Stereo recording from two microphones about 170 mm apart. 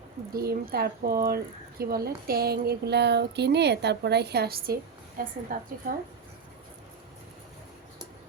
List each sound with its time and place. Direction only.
0.3 s speech: 60° right (ahead or behind)